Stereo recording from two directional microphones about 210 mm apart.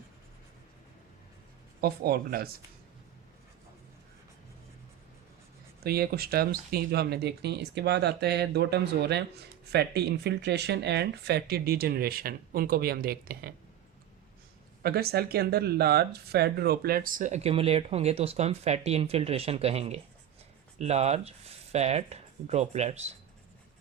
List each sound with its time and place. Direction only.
1.8 s speech: 45° right (ahead or behind)
5.8 s speech: 45° right (ahead or behind)
14.8 s speech: 45° right (ahead or behind); by 23.1 s 30° right (ahead or behind)